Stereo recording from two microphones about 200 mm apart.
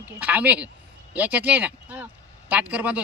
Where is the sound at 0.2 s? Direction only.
5° right (ahead or behind).